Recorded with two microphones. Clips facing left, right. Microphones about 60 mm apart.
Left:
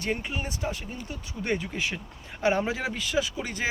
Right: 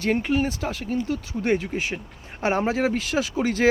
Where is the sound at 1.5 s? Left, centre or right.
Right.